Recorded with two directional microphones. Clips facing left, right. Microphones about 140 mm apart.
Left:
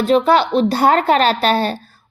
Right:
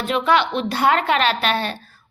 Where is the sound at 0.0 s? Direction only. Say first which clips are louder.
Left 5 dB; 35° left (ahead or behind).